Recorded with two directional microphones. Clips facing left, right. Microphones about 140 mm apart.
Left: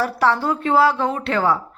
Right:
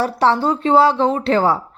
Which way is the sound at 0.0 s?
30° right (ahead or behind).